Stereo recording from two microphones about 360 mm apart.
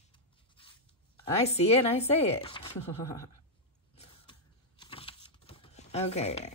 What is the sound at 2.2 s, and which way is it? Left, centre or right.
Speech, centre.